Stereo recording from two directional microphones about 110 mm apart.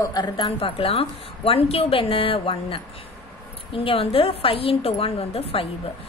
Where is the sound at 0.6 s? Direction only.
55° left (ahead or behind).